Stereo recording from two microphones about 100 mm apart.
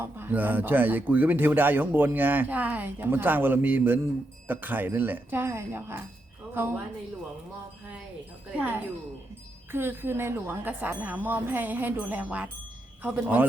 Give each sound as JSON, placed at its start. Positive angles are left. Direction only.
{"t": 0.0, "sound": "speech", "side_deg": -20}
{"t": 8.5, "sound": "speech", "side_deg": -20}